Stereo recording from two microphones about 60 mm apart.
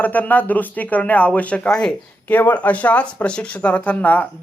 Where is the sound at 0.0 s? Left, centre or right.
Left.